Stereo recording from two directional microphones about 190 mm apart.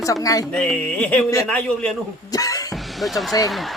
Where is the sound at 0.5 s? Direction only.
5° left (ahead or behind).